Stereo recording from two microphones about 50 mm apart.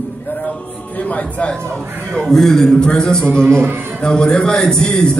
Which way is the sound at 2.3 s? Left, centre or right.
Centre.